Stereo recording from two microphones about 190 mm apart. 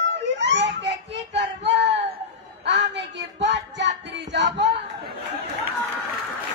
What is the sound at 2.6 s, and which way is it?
Music, 65° right (ahead or behind).